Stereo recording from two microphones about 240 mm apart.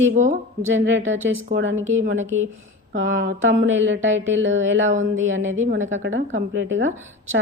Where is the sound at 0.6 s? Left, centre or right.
Right.